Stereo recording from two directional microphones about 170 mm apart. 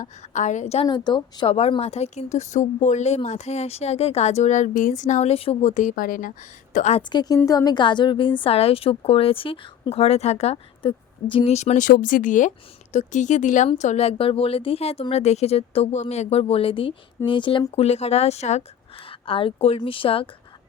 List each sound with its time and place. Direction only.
0.0 s a woman's voice: 45° left (ahead or behind)
0.9 s speech: 25° left (ahead or behind); by 6.3 s 55° left (ahead or behind)
6.7 s a woman's voice: 40° left (ahead or behind)
7.1 s a woman's voice: 25° left (ahead or behind)